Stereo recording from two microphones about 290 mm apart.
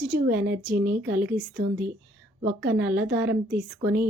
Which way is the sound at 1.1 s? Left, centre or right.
Centre.